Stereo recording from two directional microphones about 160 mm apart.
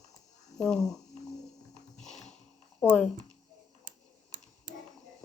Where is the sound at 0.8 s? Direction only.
20° left (ahead or behind).